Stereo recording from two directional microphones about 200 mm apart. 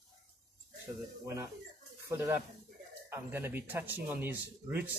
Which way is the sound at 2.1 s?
15° right (ahead or behind).